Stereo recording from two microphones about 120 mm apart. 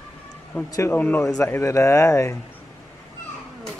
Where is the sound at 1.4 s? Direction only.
25° left (ahead or behind).